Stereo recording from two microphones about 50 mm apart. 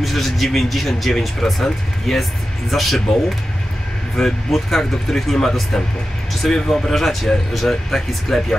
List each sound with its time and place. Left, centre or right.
0.0 s speech: centre
4.2 s speech: centre